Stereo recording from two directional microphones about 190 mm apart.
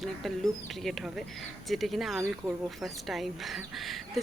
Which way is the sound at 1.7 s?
Centre (ahead or behind).